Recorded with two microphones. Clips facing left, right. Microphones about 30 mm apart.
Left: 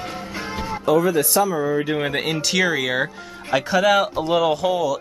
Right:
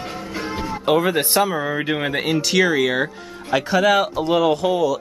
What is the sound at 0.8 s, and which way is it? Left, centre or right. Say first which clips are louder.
Speech: even; right.